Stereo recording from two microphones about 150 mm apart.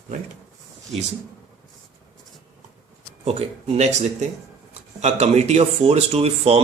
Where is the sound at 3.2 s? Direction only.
45° right (ahead or behind).